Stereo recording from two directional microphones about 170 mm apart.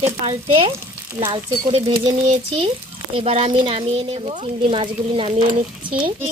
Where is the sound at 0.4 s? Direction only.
30° right (ahead or behind).